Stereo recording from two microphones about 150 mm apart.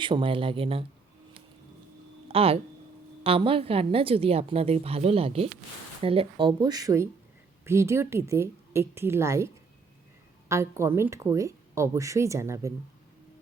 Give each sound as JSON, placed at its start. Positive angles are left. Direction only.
{"t": 0.0, "sound": "a woman's voice", "side_deg": -35}
{"t": 2.2, "sound": "a woman's voice", "side_deg": -40}
{"t": 10.5, "sound": "speech", "side_deg": -20}